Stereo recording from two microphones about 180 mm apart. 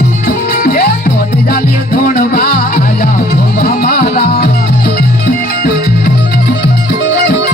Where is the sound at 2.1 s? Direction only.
50° left (ahead or behind).